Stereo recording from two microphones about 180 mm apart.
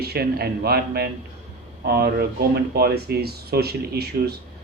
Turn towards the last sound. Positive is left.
turn(degrees=-60)  # may be behind; listen again after turning